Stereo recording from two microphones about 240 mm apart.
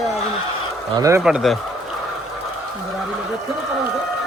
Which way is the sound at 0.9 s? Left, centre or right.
Centre.